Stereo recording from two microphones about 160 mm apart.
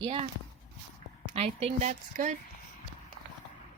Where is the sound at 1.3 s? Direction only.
40° right (ahead or behind).